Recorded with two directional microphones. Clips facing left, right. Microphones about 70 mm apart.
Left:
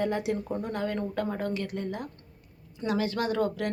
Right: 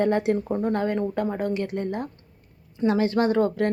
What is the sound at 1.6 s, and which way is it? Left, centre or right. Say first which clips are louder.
A woman's voice: right 6 dB; right.